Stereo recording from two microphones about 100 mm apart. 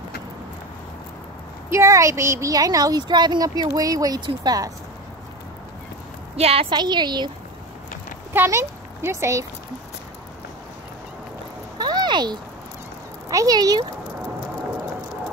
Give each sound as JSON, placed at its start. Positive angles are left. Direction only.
{"t": 1.7, "sound": "speech", "side_deg": -30}
{"t": 6.3, "sound": "a woman's voice", "side_deg": -85}
{"t": 6.7, "sound": "a woman's voice", "side_deg": -50}
{"t": 8.3, "sound": "speech", "side_deg": -25}
{"t": 11.8, "sound": "a sound", "side_deg": -45}
{"t": 13.3, "sound": "speech", "side_deg": -40}